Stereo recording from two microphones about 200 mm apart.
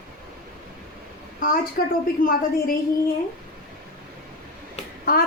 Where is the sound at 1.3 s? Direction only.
45° left (ahead or behind).